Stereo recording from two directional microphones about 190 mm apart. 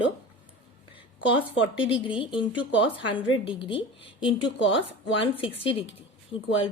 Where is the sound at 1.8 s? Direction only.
25° left (ahead or behind).